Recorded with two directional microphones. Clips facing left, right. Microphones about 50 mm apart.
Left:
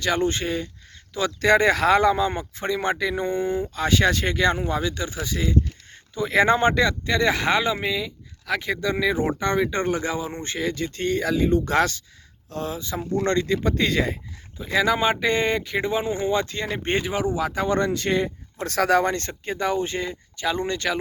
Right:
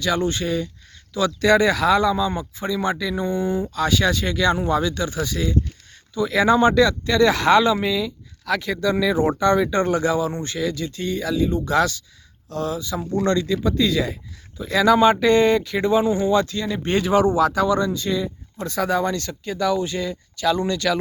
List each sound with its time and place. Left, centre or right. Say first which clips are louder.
0.0 s speech: right 1 dB; left
14.6 s speech: right 5 dB; left
17.3 s speech: right 7 dB; centre
17.7 s speech: right 1 dB; left
19.1 s speech: right 1 dB; left